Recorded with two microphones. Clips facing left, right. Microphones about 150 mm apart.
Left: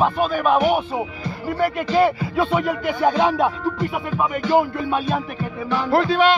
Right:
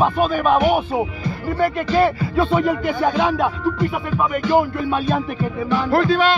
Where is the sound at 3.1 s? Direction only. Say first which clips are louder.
Left 3 dB; 25° left (ahead or behind); by 5.2 s 10° left (ahead or behind).